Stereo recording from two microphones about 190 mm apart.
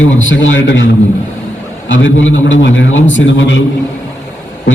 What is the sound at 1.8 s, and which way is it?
A man's voice, 85° left.